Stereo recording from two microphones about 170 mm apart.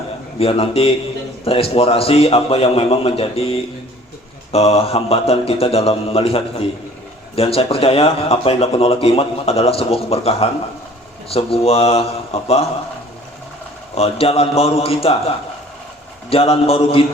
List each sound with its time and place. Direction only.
0.3 s speech: 35° left (ahead or behind)
13.9 s speech: 35° left (ahead or behind)
16.3 s speech: 35° left (ahead or behind)